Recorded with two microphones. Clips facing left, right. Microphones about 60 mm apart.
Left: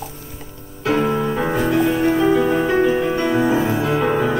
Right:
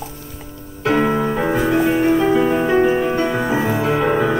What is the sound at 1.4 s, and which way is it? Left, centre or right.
Music, centre.